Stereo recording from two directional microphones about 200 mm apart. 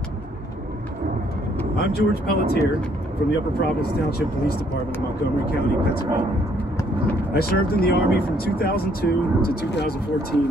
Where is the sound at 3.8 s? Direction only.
50° left (ahead or behind).